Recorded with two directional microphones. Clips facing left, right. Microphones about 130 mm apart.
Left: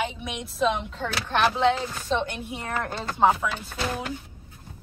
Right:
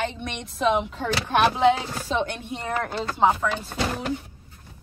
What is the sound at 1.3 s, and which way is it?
Speech, 10° right (ahead or behind).